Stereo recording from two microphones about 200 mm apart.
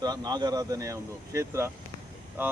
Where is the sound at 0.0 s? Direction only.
20° right (ahead or behind).